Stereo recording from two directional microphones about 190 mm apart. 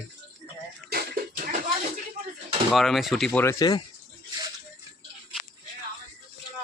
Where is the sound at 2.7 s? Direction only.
Centre (ahead or behind).